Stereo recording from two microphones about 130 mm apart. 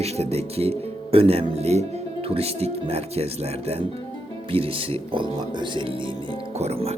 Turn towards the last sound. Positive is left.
turn(degrees=-55)  # may be behind; listen again after turning